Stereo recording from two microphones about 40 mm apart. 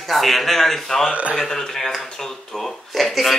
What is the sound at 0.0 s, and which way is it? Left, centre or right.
A man's voice, centre.